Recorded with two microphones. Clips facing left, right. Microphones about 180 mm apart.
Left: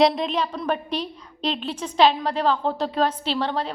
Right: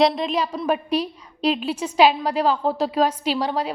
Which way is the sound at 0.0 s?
Centre (ahead or behind).